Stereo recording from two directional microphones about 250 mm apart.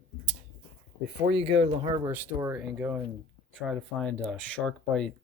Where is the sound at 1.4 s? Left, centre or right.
Right.